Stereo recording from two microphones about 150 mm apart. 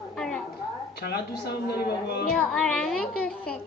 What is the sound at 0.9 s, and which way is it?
Speech, 90° left.